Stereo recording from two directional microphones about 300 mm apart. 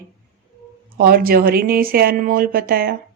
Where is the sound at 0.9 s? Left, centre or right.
Right.